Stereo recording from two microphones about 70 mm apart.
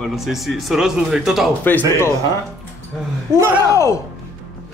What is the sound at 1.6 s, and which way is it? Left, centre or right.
Speech, left.